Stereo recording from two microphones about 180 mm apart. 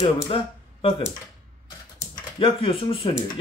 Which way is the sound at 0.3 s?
30° left (ahead or behind).